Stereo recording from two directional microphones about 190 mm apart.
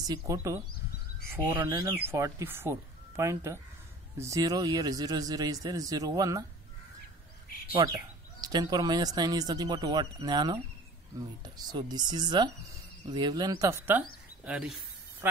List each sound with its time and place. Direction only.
0.0 s speech: 20° right (ahead or behind)
7.7 s speech: 20° right (ahead or behind); by 14.8 s 5° right (ahead or behind)